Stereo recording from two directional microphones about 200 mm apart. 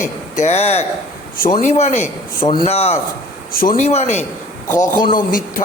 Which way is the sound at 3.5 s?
45° left (ahead or behind).